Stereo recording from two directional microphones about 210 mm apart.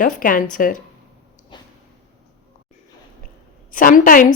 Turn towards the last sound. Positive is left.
turn(degrees=40)  # may be behind; listen again after turning